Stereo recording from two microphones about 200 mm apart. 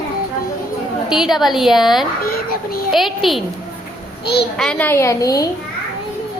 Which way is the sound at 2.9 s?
Centre (ahead or behind).